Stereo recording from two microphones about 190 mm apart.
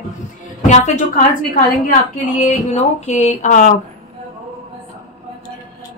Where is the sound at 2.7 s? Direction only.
35° left (ahead or behind).